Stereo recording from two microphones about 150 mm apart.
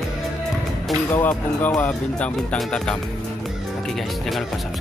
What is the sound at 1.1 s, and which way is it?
Speech, 10° left (ahead or behind).